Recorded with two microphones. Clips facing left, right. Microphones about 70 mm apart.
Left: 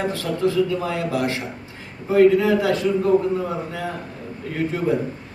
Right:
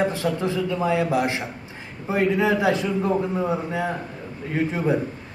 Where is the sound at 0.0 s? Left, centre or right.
Centre.